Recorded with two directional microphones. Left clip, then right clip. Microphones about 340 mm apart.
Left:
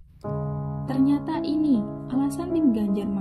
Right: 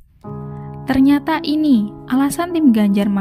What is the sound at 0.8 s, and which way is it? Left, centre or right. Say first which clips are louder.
Speech: right 9 dB; right.